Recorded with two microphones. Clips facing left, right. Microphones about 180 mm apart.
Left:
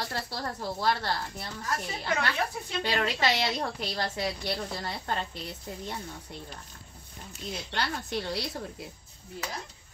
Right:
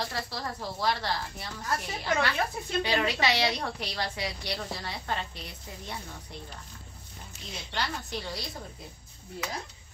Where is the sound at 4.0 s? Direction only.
50° left (ahead or behind).